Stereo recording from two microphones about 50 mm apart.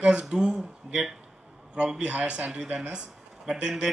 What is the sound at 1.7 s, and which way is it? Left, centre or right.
Speech, right.